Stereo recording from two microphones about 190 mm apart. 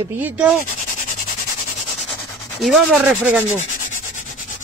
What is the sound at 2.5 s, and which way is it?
Speech, centre (ahead or behind).